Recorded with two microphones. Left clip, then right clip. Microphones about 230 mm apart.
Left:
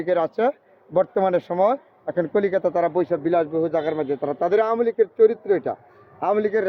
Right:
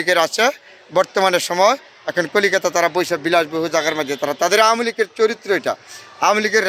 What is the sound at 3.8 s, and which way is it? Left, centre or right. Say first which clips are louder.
Speech: right 4 dB; centre.